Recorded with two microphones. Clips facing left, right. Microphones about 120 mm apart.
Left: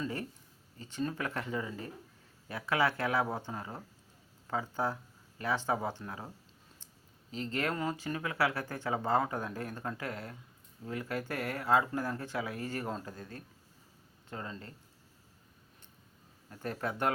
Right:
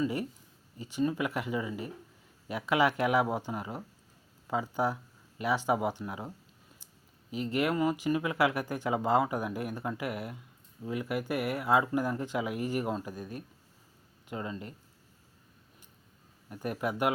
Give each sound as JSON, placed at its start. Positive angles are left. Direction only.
{"t": 0.0, "sound": "speech", "side_deg": -15}
{"t": 16.5, "sound": "speech", "side_deg": -15}